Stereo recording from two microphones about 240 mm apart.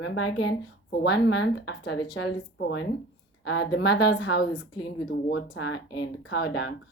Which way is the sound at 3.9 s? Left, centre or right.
Left.